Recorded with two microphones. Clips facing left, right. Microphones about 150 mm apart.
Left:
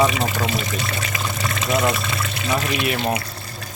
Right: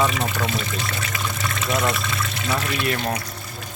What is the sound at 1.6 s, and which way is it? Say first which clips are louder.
Speech: left 3 dB; 5° left (ahead or behind).